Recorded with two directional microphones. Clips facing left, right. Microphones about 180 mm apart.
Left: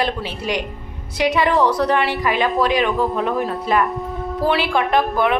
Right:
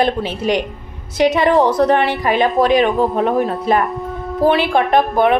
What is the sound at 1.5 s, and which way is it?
Speech, 20° right (ahead or behind).